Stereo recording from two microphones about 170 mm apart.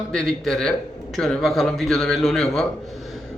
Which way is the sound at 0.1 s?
5° left (ahead or behind).